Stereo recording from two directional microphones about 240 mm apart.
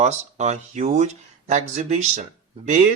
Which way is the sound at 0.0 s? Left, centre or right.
Right.